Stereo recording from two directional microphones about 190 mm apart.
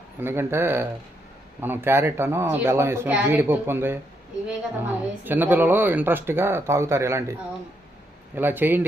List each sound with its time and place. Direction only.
0.2 s a woman's voice: 10° right (ahead or behind)
8.4 s a woman's voice: 10° right (ahead or behind)